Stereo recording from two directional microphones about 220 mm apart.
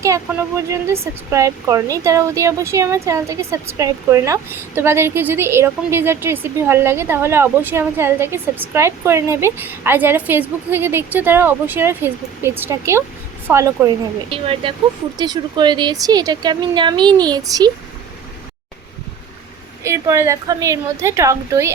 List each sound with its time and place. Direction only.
0.0 s a woman's voice: 15° right (ahead or behind)
14.3 s a woman's voice: 25° right (ahead or behind)
19.8 s a woman's voice: 10° right (ahead or behind)